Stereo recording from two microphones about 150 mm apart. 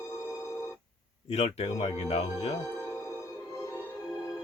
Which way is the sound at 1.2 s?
45° left (ahead or behind).